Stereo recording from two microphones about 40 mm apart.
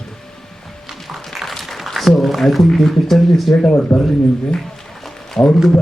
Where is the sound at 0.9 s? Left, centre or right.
Centre.